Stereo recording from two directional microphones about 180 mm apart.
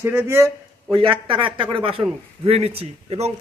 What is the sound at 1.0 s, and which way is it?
A man's voice, 30° right (ahead or behind).